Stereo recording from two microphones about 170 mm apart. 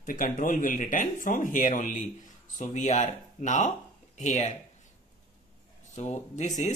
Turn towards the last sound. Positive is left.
turn(degrees=45)  # may be behind; listen again after turning